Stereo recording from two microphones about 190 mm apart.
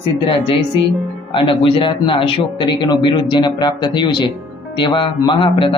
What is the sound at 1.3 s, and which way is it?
A man's voice, 25° left (ahead or behind).